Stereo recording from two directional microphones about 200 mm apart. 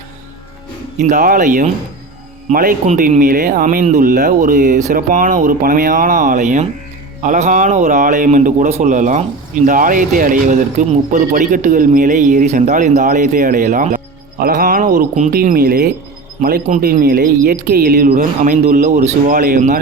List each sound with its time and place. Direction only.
1.0 s speech: 40° right (ahead or behind)